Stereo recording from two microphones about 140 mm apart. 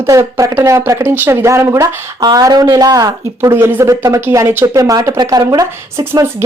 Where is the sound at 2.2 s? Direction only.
30° right (ahead or behind).